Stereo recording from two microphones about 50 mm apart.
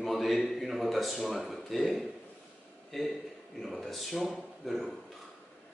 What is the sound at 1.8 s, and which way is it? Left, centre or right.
A man's voice, centre.